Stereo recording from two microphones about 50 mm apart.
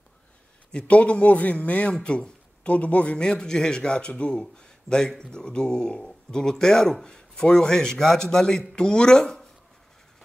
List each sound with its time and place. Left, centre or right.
0.8 s a man's voice: left; by 9.5 s centre